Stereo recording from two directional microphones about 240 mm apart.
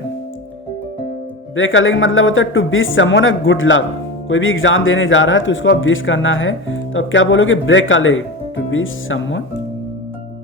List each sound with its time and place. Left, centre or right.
1.5 s speech: left